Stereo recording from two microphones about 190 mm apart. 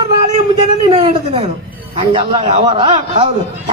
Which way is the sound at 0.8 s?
25° right (ahead or behind).